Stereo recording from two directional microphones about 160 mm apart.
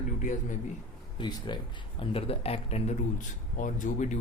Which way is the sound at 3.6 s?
55° left (ahead or behind).